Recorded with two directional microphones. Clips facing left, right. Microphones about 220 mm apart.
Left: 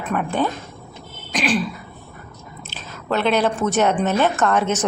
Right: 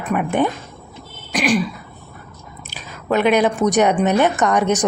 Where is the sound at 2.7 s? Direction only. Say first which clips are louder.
Right 4 dB; 15° right (ahead or behind).